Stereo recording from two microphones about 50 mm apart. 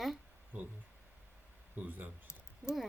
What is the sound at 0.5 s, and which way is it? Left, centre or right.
Speech, right.